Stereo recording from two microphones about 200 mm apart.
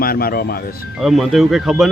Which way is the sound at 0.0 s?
50° left (ahead or behind).